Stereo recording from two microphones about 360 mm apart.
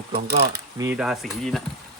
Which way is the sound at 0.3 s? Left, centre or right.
Right.